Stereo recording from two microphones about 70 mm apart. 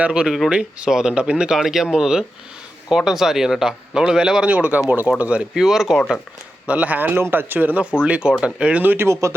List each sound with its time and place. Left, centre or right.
0.0 s speech: centre
6.7 s speech: right
8.8 s speech: right